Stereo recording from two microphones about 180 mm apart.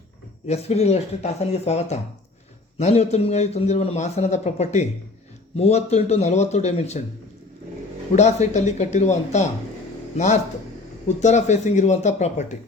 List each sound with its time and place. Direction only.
0.4 s a man's voice: 35° left (ahead or behind)
8.1 s a man's voice: 40° left (ahead or behind)
11.2 s a man's voice: 40° left (ahead or behind)